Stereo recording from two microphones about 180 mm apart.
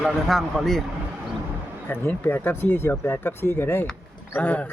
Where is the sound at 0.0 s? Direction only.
Centre (ahead or behind).